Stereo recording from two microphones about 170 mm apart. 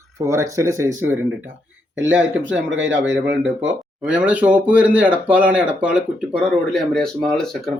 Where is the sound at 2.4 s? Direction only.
90° right.